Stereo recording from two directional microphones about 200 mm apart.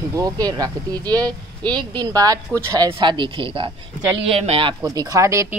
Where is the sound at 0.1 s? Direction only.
20° right (ahead or behind).